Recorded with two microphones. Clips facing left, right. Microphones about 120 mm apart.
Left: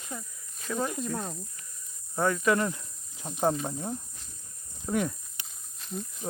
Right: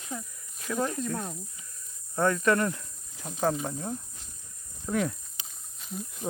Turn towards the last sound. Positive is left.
turn(degrees=0)  # may be behind; listen again after turning